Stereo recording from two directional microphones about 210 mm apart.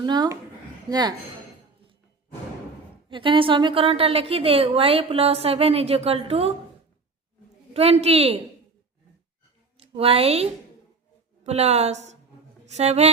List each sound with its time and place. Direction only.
0.0 s a woman's voice: 20° right (ahead or behind)
3.1 s a woman's voice: 25° right (ahead or behind)
7.7 s a woman's voice: 30° right (ahead or behind)
9.7 s a woman's voice: 25° right (ahead or behind)